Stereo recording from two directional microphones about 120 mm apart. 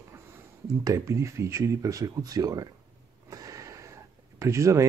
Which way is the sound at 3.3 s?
30° right (ahead or behind).